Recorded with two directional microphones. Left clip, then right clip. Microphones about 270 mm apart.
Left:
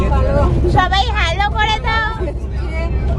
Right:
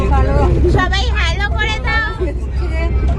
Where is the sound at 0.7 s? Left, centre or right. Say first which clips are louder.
Left 3 dB; centre.